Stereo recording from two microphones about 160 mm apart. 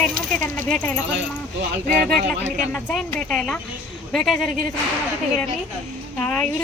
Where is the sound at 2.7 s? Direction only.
10° left (ahead or behind).